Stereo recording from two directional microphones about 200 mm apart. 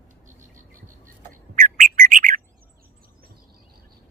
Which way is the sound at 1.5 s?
40° right (ahead or behind).